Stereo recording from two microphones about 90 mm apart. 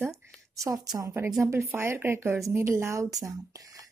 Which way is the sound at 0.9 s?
30° right (ahead or behind).